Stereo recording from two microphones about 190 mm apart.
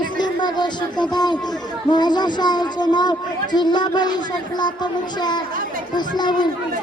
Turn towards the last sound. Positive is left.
turn(degrees=20)  # may be behind; listen again after turning